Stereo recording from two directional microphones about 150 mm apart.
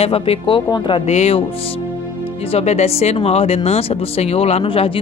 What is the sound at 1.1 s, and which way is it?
Speech, 45° left (ahead or behind).